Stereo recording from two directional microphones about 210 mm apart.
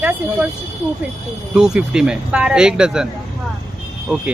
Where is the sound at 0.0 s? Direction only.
5° right (ahead or behind).